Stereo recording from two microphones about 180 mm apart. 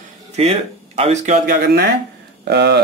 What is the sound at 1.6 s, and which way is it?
Speech, 65° right (ahead or behind).